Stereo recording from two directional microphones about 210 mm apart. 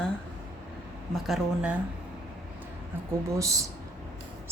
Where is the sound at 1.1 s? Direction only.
5° right (ahead or behind).